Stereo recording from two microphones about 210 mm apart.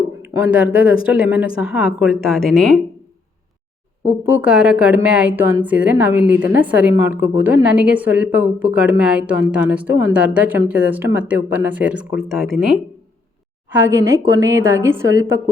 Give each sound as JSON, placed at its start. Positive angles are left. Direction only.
{"t": 0.2, "sound": "a woman's voice", "side_deg": -10}
{"t": 4.3, "sound": "a woman's voice", "side_deg": -5}